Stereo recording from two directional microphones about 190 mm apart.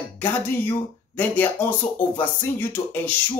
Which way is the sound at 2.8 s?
30° left (ahead or behind).